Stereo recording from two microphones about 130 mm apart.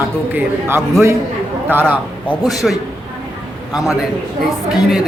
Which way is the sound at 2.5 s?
Centre (ahead or behind).